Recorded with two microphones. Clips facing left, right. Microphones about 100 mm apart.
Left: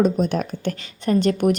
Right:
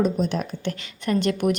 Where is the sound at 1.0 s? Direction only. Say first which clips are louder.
Left 4 dB; 35° left (ahead or behind).